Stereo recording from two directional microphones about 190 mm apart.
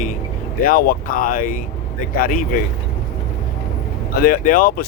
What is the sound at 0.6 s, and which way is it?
Speech, 50° left (ahead or behind).